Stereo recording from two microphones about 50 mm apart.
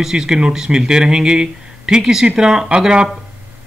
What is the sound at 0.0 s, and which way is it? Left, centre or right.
Speech, centre.